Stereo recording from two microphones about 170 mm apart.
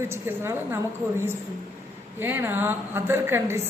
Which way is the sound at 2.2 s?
10° right (ahead or behind).